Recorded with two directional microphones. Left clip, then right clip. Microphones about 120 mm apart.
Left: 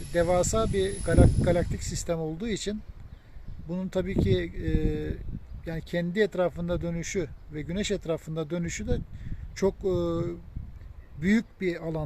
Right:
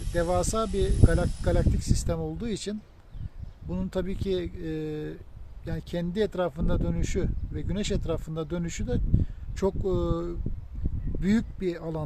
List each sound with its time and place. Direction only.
0.1 s speech: 10° left (ahead or behind)